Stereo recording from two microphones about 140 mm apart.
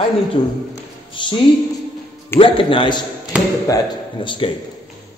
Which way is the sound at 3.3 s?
10° right (ahead or behind).